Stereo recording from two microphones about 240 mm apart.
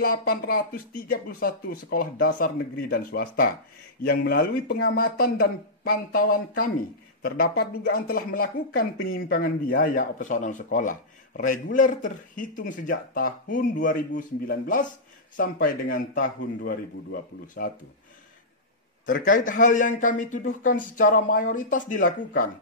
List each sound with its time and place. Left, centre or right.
0.0 s speech: left
19.1 s speech: left